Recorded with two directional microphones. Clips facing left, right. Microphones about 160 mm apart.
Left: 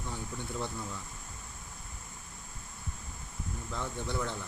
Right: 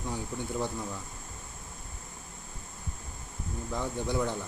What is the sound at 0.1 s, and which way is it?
Speech, 15° right (ahead or behind).